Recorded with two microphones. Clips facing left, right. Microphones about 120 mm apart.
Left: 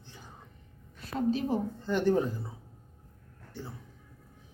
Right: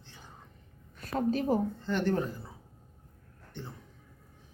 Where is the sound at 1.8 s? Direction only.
15° left (ahead or behind).